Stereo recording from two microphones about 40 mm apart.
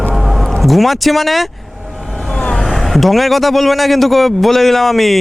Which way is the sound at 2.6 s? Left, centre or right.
Centre.